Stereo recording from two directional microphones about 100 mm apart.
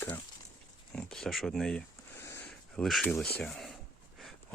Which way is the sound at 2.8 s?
Centre (ahead or behind).